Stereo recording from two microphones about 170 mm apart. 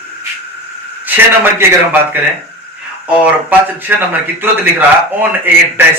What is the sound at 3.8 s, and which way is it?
A man's voice, 10° right (ahead or behind).